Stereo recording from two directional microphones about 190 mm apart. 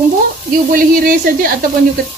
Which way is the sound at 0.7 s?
50° right (ahead or behind).